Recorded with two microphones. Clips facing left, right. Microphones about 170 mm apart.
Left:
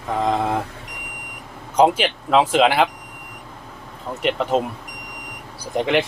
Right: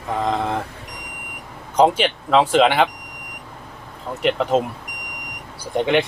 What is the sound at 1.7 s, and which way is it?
Speech, 5° left (ahead or behind).